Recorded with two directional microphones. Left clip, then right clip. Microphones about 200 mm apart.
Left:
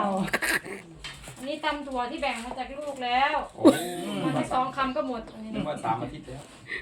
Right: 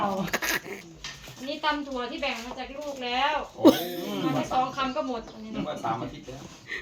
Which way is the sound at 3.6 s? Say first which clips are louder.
Right 1 dB; 10° right (ahead or behind).